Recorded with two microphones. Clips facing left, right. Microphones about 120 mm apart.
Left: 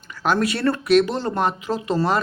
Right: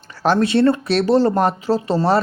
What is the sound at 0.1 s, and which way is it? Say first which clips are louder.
Speech: right 5 dB; 35° right (ahead or behind).